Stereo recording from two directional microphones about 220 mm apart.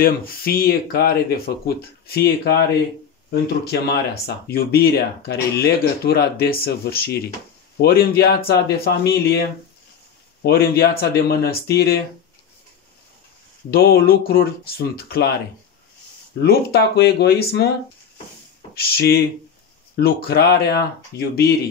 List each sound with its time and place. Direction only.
0.0 s speech: 40° left (ahead or behind)
10.4 s speech: 45° left (ahead or behind)
13.7 s speech: 45° left (ahead or behind)
16.4 s speech: 45° left (ahead or behind)
18.8 s speech: 45° left (ahead or behind)